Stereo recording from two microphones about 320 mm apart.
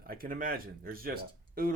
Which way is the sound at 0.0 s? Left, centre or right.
Right.